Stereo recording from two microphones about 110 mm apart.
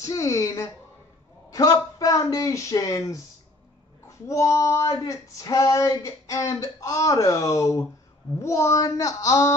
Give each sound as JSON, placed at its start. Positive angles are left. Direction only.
{"t": 0.0, "sound": "speech", "side_deg": 30}
{"t": 4.3, "sound": "speech", "side_deg": 30}